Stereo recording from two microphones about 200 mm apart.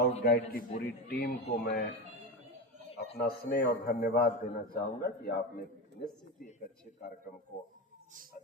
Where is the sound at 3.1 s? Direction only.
50° left (ahead or behind).